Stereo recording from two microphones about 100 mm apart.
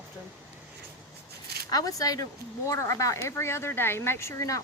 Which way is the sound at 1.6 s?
40° left (ahead or behind).